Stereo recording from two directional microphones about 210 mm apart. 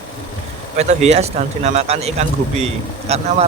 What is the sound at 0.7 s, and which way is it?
Speech, 30° right (ahead or behind).